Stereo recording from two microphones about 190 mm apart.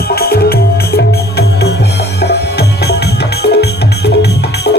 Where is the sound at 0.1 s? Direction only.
55° left (ahead or behind).